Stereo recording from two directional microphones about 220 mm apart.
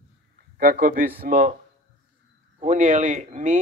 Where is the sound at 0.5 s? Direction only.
40° right (ahead or behind).